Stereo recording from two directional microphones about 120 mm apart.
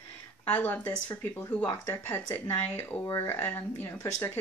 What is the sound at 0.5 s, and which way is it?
Speech, 15° left (ahead or behind).